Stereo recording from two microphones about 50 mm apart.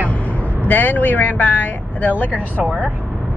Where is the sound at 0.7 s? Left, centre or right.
Left.